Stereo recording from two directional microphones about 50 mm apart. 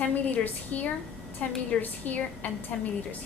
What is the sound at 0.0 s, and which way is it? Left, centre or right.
A woman's voice, left.